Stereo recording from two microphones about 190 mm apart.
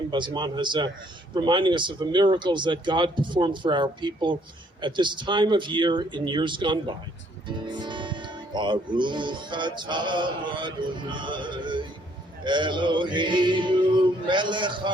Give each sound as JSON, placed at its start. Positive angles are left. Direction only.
{"t": 0.1, "sound": "speech", "side_deg": -25}